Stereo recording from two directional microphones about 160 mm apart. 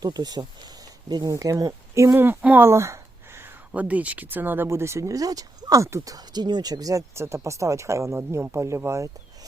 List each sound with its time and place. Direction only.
0.0 s speech: 25° right (ahead or behind)